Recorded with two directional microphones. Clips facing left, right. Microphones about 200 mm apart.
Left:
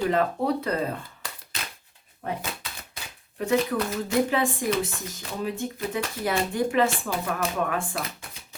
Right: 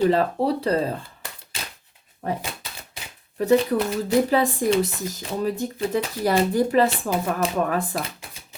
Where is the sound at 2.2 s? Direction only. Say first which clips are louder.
Right 4 dB; 40° right (ahead or behind).